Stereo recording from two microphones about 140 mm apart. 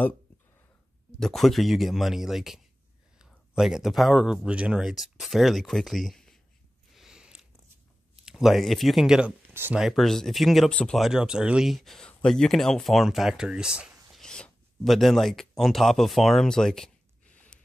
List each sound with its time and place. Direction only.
1.2 s speech: centre (ahead or behind)
6.9 s a sound: 5° right (ahead or behind)
8.3 s speech: centre (ahead or behind)
9.5 s speech: 15° right (ahead or behind)
9.8 s speech: centre (ahead or behind)
14.1 s a sound: 5° left (ahead or behind)